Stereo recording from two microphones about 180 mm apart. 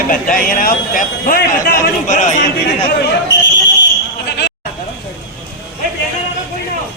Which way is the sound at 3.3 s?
80° left.